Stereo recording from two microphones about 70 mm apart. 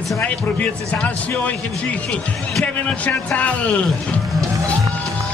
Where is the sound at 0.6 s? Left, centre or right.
Left.